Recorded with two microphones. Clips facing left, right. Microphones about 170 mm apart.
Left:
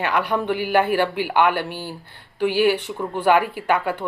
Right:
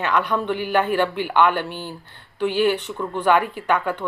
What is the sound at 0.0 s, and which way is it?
A woman's voice, 10° left (ahead or behind).